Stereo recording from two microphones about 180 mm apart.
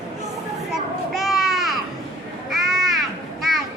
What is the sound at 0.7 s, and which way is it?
Children playing, centre (ahead or behind).